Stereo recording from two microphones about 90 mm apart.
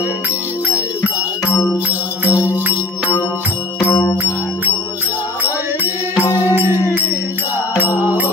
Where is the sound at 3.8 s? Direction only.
25° left (ahead or behind).